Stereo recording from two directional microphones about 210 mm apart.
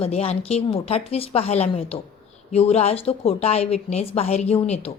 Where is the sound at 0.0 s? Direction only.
30° left (ahead or behind).